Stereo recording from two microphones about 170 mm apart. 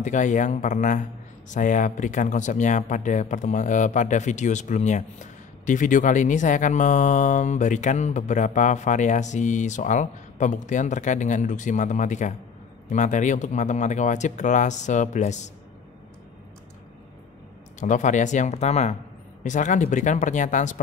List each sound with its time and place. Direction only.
0.0 s speech: 45° left (ahead or behind)
17.7 s speech: 45° left (ahead or behind)